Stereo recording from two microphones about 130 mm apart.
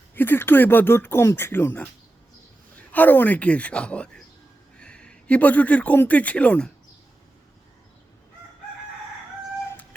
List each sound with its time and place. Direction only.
0.1 s speech: 15° left (ahead or behind)
2.9 s speech: 15° left (ahead or behind)